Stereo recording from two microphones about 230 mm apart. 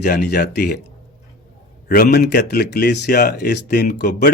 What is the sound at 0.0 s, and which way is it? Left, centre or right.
Speech, left.